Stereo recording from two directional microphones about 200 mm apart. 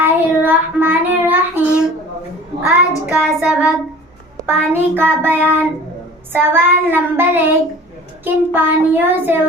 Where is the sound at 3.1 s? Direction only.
5° right (ahead or behind).